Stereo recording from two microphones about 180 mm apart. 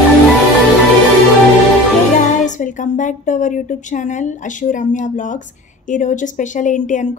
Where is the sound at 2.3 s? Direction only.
45° left (ahead or behind).